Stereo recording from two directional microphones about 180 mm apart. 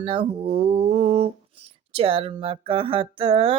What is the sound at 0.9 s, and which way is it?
Speech, 35° right (ahead or behind).